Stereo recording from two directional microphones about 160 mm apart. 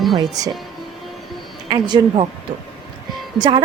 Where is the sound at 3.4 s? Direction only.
30° right (ahead or behind).